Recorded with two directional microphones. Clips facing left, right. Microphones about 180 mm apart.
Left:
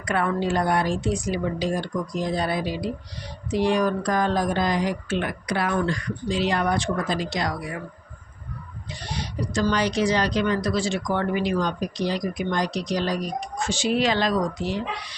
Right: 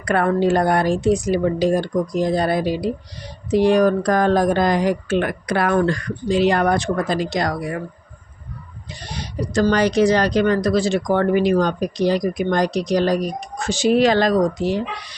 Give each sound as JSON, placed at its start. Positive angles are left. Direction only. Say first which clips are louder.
{"t": 0.0, "sound": "speech", "louder": "right 7 dB", "side_deg": -45}
{"t": 9.2, "sound": "speech", "louder": "right 6 dB", "side_deg": -50}
{"t": 11.1, "sound": "speech", "louder": "right 8 dB", "side_deg": -50}